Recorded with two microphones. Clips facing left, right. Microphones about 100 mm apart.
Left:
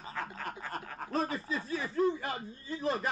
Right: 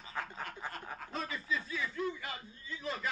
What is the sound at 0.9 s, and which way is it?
Speech, 40° left (ahead or behind).